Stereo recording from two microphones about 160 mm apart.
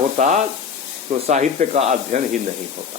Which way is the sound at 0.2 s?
50° right (ahead or behind).